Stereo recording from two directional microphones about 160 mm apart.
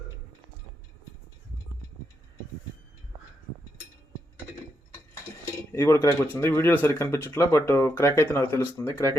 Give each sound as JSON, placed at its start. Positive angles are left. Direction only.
{"t": 5.7, "sound": "speech", "side_deg": 15}